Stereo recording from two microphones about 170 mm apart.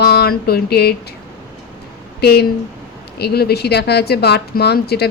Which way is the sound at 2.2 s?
70° left (ahead or behind).